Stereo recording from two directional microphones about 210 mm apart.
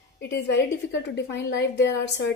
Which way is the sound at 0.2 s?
55° left (ahead or behind).